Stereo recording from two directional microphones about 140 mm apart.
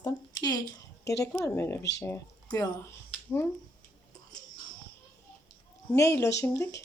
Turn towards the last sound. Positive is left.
turn(degrees=20)  # may be behind; listen again after turning